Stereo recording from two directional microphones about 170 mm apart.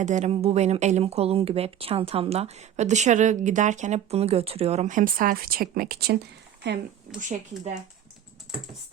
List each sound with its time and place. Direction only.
0.0 s speech: 45° right (ahead or behind); by 6.1 s 65° right (ahead or behind)
6.6 s speech: 90° right
7.2 s speech: 45° right (ahead or behind)